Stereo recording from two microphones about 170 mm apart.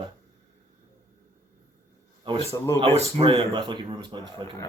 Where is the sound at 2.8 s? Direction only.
35° right (ahead or behind).